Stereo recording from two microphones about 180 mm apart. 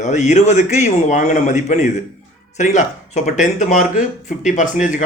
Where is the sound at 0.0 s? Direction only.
40° left (ahead or behind).